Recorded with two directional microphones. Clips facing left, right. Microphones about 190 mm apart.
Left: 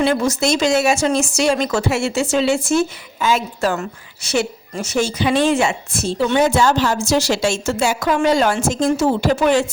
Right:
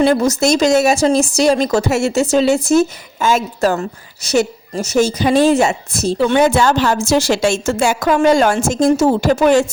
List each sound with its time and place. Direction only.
0.0 s speech: 40° right (ahead or behind)
6.1 s a woman's voice: 55° right (ahead or behind)